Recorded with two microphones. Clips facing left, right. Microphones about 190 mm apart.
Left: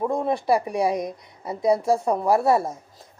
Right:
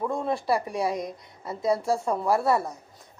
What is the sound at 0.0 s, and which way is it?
Speech, 20° left (ahead or behind).